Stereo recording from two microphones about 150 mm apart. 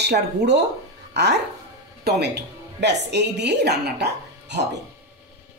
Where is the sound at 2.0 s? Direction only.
90° right.